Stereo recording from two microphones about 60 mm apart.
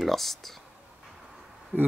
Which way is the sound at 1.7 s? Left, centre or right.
Right.